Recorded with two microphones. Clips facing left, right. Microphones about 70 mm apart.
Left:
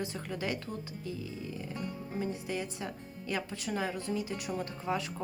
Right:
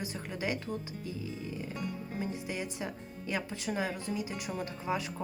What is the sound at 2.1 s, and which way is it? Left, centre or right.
Speech, right.